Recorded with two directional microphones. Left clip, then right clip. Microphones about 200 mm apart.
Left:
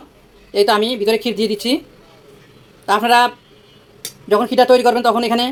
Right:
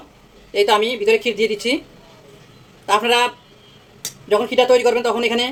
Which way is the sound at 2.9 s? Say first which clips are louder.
Left 3 dB; 30° left (ahead or behind).